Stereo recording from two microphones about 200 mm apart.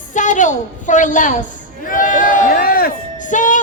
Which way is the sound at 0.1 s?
40° left (ahead or behind).